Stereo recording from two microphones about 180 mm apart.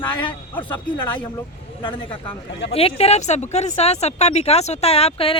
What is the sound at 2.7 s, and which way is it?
Speech, 35° left (ahead or behind).